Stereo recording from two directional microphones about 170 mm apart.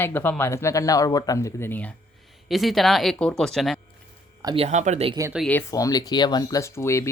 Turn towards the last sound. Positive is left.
turn(degrees=15)  # may be behind; listen again after turning